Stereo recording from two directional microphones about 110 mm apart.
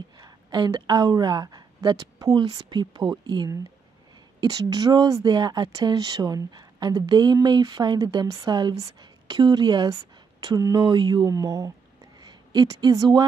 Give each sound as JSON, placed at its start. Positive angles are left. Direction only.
{"t": 0.2, "sound": "a woman's voice", "side_deg": -40}
{"t": 11.2, "sound": "speech", "side_deg": -35}